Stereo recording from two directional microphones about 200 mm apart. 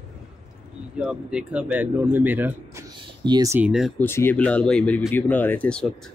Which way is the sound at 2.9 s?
20° right (ahead or behind).